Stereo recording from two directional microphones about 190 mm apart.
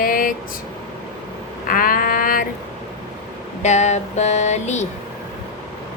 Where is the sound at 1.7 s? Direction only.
50° left (ahead or behind).